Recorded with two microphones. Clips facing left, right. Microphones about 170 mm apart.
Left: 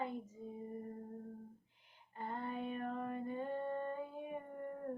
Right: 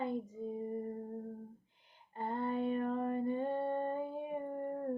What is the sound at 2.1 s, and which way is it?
Female singing, 30° right (ahead or behind).